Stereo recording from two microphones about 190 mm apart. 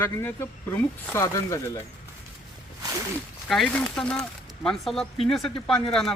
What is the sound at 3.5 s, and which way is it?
Speech, centre (ahead or behind).